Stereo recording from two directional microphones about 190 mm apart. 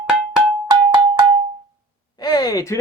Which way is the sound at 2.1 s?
20° left (ahead or behind).